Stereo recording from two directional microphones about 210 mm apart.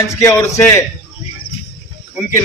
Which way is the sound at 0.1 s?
15° left (ahead or behind).